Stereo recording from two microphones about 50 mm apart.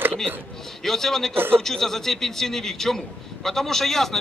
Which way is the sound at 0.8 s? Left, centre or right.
Centre.